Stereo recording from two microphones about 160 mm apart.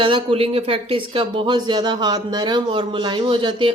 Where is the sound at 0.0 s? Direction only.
30° right (ahead or behind).